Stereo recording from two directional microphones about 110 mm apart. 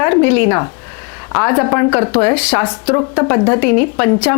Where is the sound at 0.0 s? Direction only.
25° left (ahead or behind).